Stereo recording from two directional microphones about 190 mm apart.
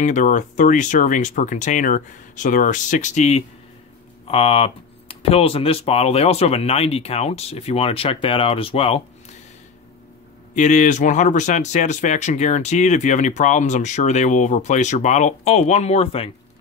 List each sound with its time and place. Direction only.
0.0 s speech: 40° left (ahead or behind)
10.5 s speech: 40° left (ahead or behind)